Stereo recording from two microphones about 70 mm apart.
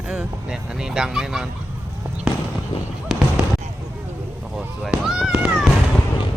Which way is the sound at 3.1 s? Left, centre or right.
Centre.